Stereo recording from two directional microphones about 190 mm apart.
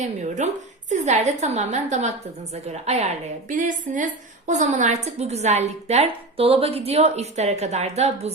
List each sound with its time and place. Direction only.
0.0 s a woman's voice: 40° right (ahead or behind)